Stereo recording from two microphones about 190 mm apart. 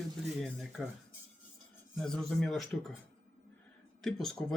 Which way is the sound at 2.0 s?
5° left (ahead or behind).